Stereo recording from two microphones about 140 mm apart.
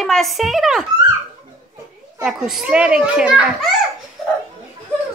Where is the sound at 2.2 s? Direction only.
5° right (ahead or behind).